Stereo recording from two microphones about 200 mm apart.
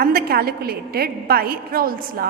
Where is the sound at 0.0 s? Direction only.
50° right (ahead or behind).